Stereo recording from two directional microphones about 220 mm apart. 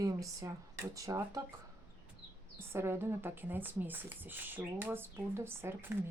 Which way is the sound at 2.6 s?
10° right (ahead or behind).